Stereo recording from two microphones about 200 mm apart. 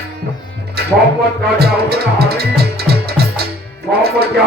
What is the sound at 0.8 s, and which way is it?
Music, 50° right (ahead or behind).